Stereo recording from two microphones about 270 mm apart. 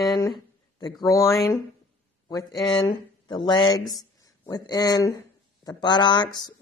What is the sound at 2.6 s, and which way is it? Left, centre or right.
Speech, centre.